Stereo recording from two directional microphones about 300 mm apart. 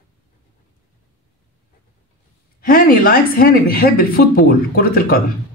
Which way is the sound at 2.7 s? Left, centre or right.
Left.